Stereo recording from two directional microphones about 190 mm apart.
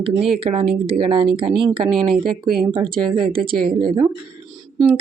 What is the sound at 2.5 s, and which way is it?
Speech, 30° right (ahead or behind).